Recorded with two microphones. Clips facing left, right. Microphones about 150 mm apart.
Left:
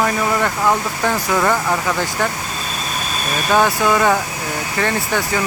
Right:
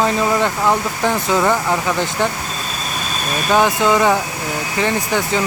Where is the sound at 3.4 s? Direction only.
15° right (ahead or behind).